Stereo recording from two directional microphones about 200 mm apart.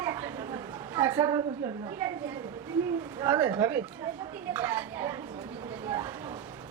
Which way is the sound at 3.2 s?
10° right (ahead or behind).